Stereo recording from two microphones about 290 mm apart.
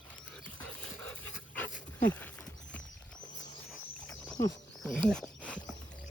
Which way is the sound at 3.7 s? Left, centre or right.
Centre.